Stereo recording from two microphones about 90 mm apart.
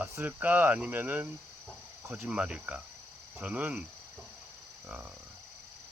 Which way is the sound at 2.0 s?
30° right (ahead or behind).